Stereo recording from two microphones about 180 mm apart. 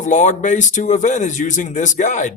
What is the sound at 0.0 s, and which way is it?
Speech, 45° left (ahead or behind).